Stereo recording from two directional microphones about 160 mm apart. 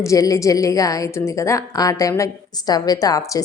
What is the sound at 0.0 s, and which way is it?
A woman's voice, 20° left (ahead or behind).